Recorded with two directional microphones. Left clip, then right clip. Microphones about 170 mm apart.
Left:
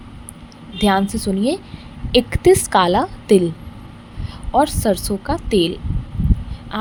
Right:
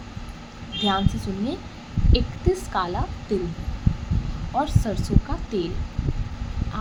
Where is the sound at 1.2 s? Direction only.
10° left (ahead or behind).